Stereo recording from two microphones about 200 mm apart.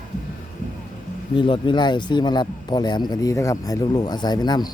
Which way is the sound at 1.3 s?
25° left (ahead or behind).